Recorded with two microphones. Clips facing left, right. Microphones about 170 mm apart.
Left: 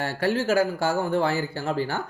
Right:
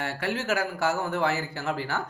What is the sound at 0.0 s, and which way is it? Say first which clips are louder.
A man's voice: left 6 dB; 35° left (ahead or behind).